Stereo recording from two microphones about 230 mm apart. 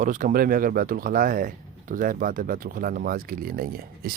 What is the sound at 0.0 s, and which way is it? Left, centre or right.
Speech, right.